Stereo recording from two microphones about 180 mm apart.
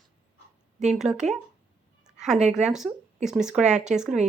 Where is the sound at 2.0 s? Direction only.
Centre (ahead or behind).